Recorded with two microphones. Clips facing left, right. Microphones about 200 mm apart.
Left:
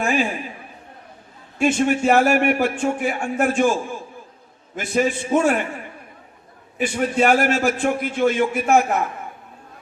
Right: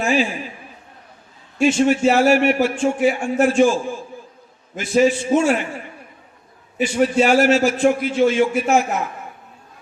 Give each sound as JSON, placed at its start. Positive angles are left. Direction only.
{"t": 0.0, "sound": "a man's voice", "side_deg": 50}
{"t": 1.6, "sound": "a man's voice", "side_deg": 50}
{"t": 4.9, "sound": "a man's voice", "side_deg": 55}
{"t": 6.7, "sound": "a man's voice", "side_deg": 55}